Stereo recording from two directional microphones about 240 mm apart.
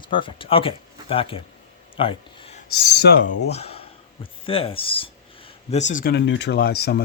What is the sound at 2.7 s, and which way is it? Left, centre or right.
Speech, left.